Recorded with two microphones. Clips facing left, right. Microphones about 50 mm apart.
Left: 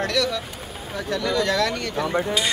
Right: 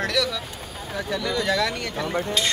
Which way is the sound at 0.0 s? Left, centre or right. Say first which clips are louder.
Left 1 dB; centre.